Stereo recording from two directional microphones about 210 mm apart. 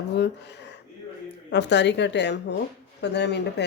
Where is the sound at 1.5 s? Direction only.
55° left (ahead or behind).